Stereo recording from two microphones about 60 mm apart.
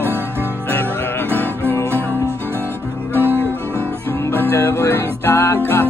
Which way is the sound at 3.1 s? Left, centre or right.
Right.